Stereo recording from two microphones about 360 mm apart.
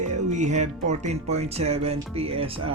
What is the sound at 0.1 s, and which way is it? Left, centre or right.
Speech, centre.